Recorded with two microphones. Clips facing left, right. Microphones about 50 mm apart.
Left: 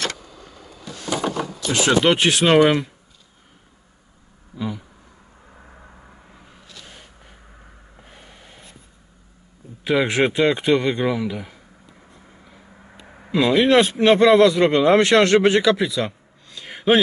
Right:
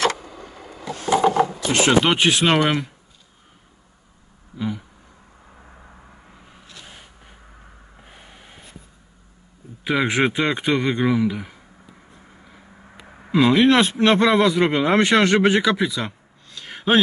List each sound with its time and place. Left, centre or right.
1.0 s a sound: right
2.0 s speech: centre
4.6 s a sound: centre
5.5 s vehicle: centre
6.5 s vehicle: centre
9.8 s speech: centre
12.4 s vehicle: centre
14.3 s speech: centre
16.4 s a sound: centre